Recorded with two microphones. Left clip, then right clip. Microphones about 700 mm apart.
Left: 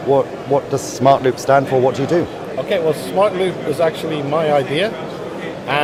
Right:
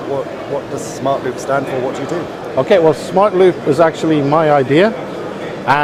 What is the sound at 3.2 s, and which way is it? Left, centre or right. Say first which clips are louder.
Speech: right 5 dB; right.